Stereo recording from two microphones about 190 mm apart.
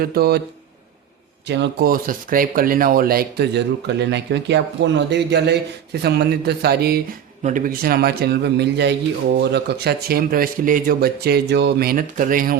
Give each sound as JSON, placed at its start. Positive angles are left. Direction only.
{"t": 0.0, "sound": "speech", "side_deg": -55}
{"t": 1.5, "sound": "speech", "side_deg": -65}
{"t": 7.4, "sound": "speech", "side_deg": -45}